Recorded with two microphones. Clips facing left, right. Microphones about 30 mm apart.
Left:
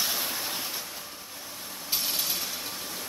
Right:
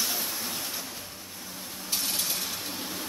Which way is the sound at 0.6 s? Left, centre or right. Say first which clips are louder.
Even; centre.